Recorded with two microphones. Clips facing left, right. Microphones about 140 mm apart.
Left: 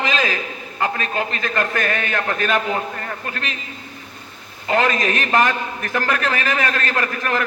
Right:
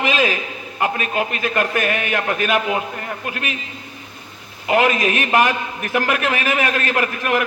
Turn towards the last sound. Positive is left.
turn(degrees=-15)  # may be behind; listen again after turning